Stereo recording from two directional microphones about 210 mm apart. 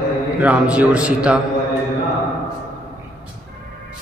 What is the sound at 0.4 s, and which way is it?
Speech, 5° right (ahead or behind).